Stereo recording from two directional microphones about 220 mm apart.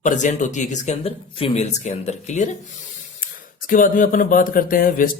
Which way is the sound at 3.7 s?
35° left (ahead or behind).